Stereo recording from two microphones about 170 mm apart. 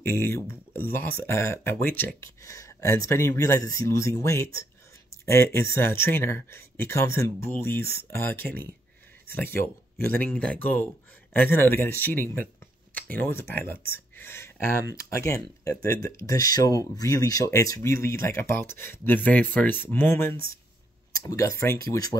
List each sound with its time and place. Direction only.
0.0 s speech: 15° left (ahead or behind)
14.1 s a sound: 15° left (ahead or behind)
15.0 s speech: 15° left (ahead or behind)